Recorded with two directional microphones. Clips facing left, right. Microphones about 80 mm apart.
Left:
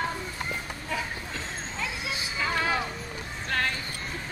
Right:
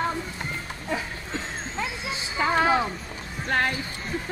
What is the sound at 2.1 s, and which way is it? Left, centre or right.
Music, right.